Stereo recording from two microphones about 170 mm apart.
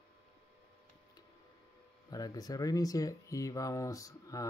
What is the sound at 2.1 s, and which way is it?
Speech, 20° left (ahead or behind).